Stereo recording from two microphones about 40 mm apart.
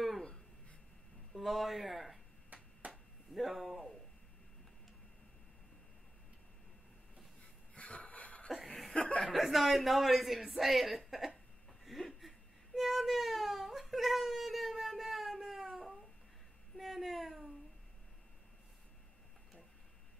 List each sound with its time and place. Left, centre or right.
1.3 s speech: centre
2.8 s chop: right
3.3 s a sound: centre
7.7 s wheeze: left
8.6 s chuckle: centre
9.3 s a man's voice: centre
11.8 s whimper: centre
16.7 s a sound: centre